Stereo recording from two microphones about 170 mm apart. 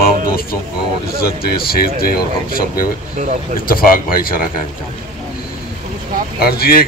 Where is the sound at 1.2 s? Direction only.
65° left (ahead or behind).